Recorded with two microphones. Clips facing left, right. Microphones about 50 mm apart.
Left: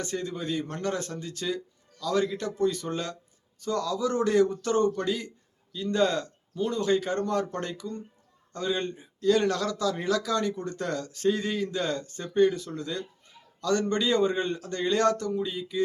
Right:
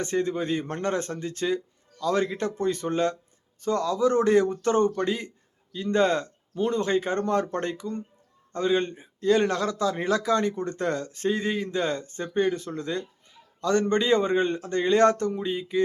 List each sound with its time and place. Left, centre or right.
0.0 s speech: right